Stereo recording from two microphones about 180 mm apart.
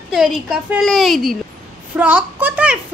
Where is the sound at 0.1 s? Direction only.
Centre (ahead or behind).